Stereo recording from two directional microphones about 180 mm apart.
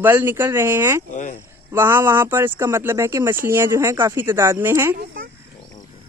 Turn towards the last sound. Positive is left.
turn(degrees=-15)  # may be behind; listen again after turning